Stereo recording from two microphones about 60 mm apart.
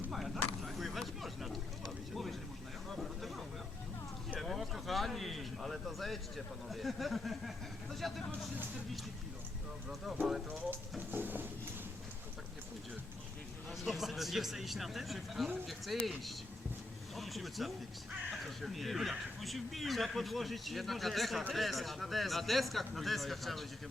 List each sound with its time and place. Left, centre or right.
0.1 s a sound: centre
2.9 s vehicle: centre
4.4 s speech: centre
9.9 s speech: centre
11.1 s a sound: right
13.7 s speech: centre